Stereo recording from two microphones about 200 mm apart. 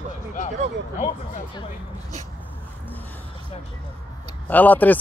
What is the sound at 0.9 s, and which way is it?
Speech, 40° left (ahead or behind).